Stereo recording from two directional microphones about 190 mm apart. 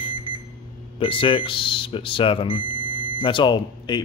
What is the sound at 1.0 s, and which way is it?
Speech, 25° left (ahead or behind).